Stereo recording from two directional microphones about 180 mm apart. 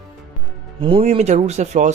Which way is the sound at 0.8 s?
30° right (ahead or behind).